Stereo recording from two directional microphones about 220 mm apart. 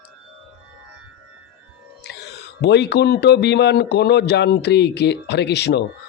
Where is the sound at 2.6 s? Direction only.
50° left (ahead or behind).